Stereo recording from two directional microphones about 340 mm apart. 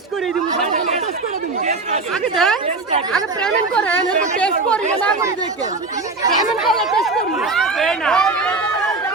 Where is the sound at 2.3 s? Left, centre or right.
Centre.